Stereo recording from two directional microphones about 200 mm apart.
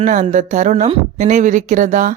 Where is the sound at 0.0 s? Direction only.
35° right (ahead or behind).